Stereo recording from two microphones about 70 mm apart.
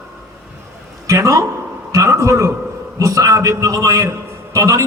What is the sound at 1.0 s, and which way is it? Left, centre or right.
A man's voice, right.